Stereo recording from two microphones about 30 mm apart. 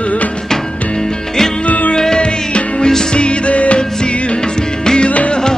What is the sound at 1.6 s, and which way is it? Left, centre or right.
Music, left.